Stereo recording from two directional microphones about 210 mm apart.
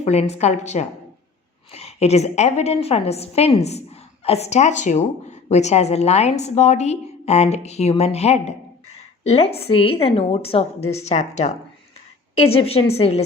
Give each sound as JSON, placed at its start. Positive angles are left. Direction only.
{"t": 0.0, "sound": "a woman's voice", "side_deg": 30}